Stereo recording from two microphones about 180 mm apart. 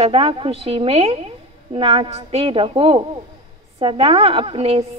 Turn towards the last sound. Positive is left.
turn(degrees=-35)  # may be behind; listen again after turning